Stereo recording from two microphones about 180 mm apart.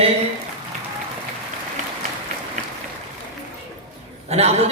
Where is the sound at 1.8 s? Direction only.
40° right (ahead or behind).